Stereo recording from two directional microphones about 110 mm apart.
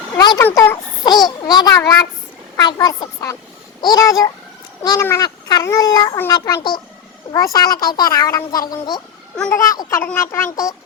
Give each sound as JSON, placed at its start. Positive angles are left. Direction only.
{"t": 0.2, "sound": "a sound", "side_deg": 40}
{"t": 0.5, "sound": "speech", "side_deg": 20}
{"t": 1.0, "sound": "a child's voice", "side_deg": 40}